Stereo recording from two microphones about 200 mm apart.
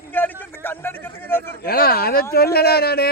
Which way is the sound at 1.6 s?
50° left (ahead or behind).